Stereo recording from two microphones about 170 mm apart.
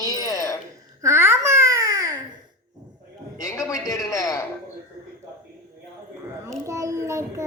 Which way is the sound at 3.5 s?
20° left (ahead or behind).